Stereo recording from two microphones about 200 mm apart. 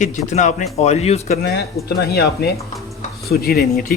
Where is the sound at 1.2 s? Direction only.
50° left (ahead or behind).